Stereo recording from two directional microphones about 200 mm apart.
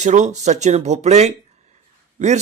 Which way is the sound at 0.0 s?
35° right (ahead or behind).